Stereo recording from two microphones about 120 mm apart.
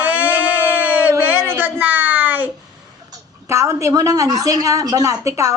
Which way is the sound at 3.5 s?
25° right (ahead or behind).